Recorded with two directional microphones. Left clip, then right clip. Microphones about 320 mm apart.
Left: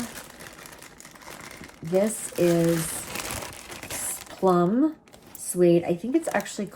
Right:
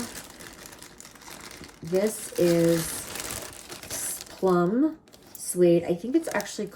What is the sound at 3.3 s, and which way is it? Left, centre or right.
Crushing, left.